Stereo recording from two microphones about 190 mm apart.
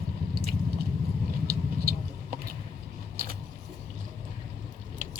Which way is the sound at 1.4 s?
50° right (ahead or behind).